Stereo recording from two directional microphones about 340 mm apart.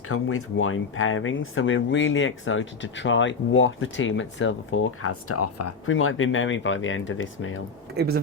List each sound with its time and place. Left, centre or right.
0.1 s speech: left
7.9 s speech: right